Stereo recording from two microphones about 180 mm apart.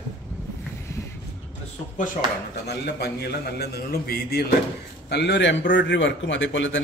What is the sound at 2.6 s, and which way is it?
A man's voice, 65° left (ahead or behind).